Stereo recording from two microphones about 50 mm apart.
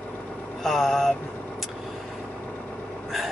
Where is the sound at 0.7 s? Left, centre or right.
Centre.